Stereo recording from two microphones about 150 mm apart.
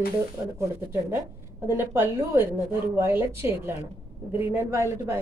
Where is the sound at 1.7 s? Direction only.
15° right (ahead or behind).